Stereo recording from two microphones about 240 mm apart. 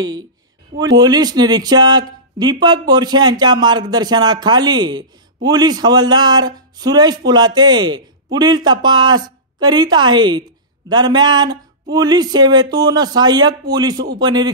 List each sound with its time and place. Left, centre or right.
0.7 s speech: centre